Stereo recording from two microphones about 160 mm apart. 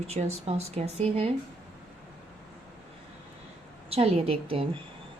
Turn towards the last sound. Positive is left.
turn(degrees=-35)  # may be behind; listen again after turning